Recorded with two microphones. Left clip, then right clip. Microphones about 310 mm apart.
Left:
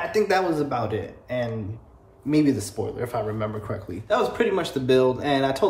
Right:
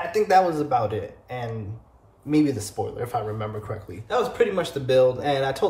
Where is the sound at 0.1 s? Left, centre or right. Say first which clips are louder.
Right 4 dB; centre.